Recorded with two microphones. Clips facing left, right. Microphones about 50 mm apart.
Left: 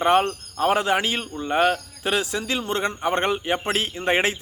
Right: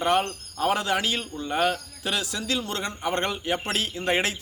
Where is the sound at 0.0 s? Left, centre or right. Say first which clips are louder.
Left 4 dB; left.